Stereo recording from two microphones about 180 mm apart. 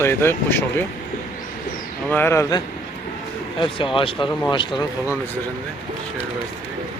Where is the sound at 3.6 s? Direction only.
30° left (ahead or behind).